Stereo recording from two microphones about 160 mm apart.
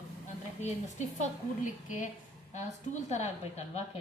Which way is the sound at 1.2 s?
50° left (ahead or behind).